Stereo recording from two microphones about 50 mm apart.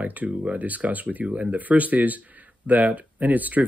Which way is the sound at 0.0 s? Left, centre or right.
Right.